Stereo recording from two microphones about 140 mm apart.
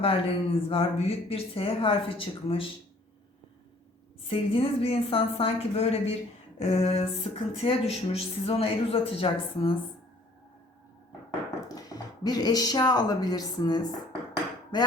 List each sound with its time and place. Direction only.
0.0 s speech: 40° left (ahead or behind)
4.3 s speech: 40° left (ahead or behind)
11.7 s speech: 30° left (ahead or behind)